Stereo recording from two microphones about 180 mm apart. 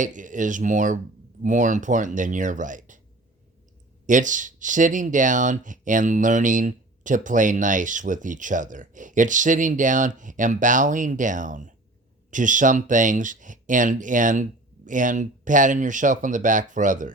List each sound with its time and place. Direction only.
0.0 s speech: 45° right (ahead or behind)
4.0 s speech: 45° right (ahead or behind)